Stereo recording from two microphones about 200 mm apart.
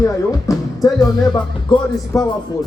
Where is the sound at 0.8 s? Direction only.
20° left (ahead or behind).